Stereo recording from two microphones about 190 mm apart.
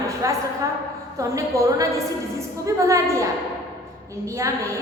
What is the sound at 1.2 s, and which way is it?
A woman's voice, 15° right (ahead or behind).